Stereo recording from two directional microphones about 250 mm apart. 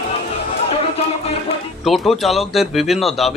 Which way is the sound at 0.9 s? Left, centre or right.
Left.